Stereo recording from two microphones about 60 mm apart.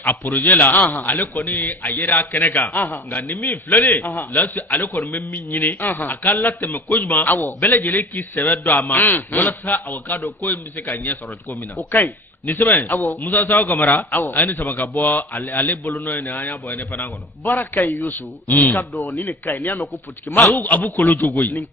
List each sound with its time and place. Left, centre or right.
0.0 s a man's voice: left